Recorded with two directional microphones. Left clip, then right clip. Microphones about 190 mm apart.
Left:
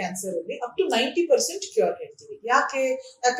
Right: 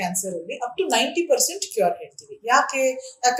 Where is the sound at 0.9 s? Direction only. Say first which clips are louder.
Right 1 dB; 45° right (ahead or behind).